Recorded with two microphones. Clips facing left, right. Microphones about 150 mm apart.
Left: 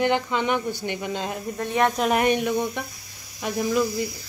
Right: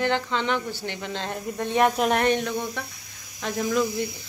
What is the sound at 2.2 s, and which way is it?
Speech, 15° left (ahead or behind).